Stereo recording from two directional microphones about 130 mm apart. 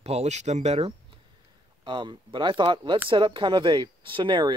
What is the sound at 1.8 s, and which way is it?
Speech, 35° right (ahead or behind).